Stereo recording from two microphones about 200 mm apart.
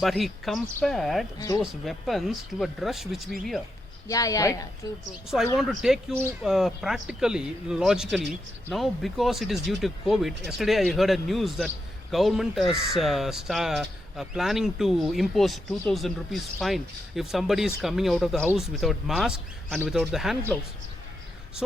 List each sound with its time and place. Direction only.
0.0 s speech: centre (ahead or behind)
1.4 s speech: 20° left (ahead or behind)
1.6 s speech: centre (ahead or behind)
4.1 s speech: 15° left (ahead or behind)
5.5 s speech: centre (ahead or behind)